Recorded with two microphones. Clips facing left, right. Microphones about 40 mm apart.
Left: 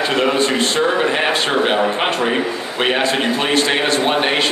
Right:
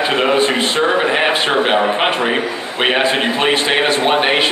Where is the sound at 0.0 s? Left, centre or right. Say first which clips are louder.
Right 2 dB; centre.